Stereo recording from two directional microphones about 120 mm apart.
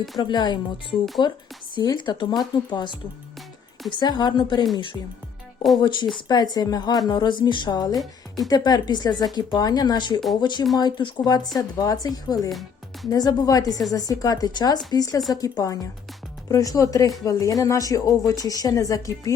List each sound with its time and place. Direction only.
0.2 s speech: 40° left (ahead or behind)
6.2 s speech: 35° left (ahead or behind)
12.5 s music: centre (ahead or behind)
13.1 s speech: 30° left (ahead or behind)